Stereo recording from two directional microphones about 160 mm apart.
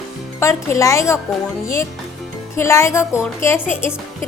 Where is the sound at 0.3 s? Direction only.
20° left (ahead or behind).